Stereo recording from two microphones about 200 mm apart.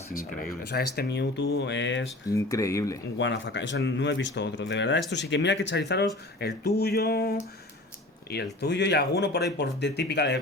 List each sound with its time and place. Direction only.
0.7 s speech: 55° left (ahead or behind)
2.3 s speech: 15° left (ahead or behind)
3.2 s speech: 65° left (ahead or behind)
8.6 s speech: 60° left (ahead or behind)